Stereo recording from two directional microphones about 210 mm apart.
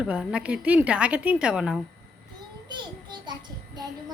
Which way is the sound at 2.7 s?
20° right (ahead or behind).